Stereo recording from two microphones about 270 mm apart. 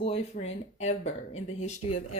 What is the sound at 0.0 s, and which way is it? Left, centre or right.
Speech, left.